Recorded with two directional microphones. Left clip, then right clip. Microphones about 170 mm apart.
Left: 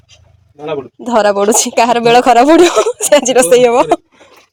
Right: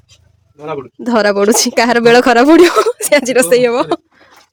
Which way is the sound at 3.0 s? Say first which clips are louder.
Left 2 dB; 15° right (ahead or behind).